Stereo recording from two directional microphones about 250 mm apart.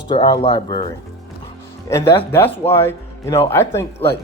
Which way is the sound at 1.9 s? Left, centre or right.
Centre.